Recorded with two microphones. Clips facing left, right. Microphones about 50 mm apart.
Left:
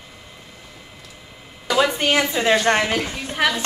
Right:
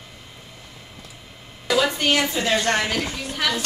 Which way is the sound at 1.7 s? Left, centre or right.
Centre.